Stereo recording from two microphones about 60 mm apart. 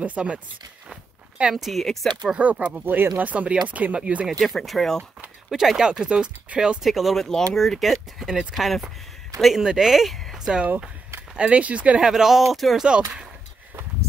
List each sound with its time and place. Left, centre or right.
0.0 s speech: right
1.4 s speech: centre
1.7 s speech: centre
2.3 s speech: right
2.8 s speech: right
3.2 s speech: right
4.4 s speech: centre
5.9 s speech: centre
6.8 s speech: centre
8.5 s speech: centre
11.3 s speech: centre